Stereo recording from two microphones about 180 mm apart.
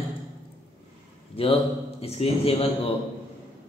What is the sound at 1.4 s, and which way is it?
A man's voice, 30° left (ahead or behind).